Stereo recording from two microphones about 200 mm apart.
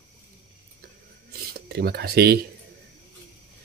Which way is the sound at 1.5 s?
50° right (ahead or behind).